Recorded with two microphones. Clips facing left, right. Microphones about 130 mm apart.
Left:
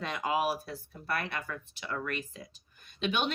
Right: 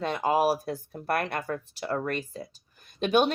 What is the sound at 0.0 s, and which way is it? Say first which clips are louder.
Speech: right 6 dB; 35° right (ahead or behind).